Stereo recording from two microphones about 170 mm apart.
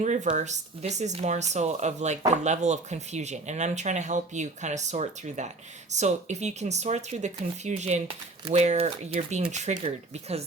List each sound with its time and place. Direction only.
0.0 s speech: 45° right (ahead or behind)